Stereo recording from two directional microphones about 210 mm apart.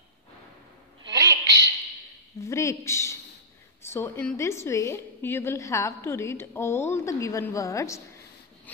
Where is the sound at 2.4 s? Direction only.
15° left (ahead or behind).